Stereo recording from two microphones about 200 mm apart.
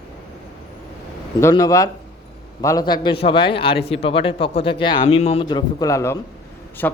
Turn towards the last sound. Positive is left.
turn(degrees=10)  # may be behind; listen again after turning